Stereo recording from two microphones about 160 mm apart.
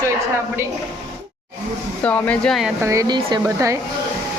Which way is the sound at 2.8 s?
20° right (ahead or behind).